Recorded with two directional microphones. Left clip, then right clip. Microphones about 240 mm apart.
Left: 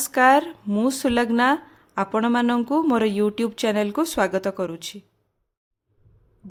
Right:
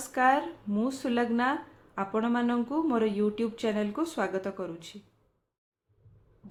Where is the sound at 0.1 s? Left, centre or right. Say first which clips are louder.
Left 8 dB; left.